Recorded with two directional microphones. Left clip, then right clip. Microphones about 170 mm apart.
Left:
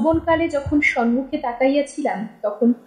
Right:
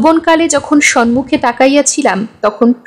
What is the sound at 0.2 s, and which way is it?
A woman's voice, 50° right (ahead or behind).